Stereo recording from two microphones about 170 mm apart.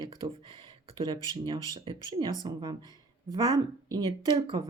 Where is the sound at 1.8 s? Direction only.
25° right (ahead or behind).